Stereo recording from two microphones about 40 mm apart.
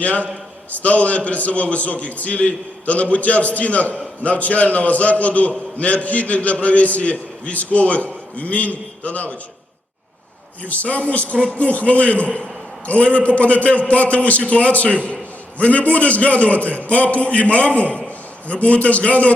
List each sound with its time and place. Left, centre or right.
0.0 s a man's voice: left
10.7 s a man's voice: left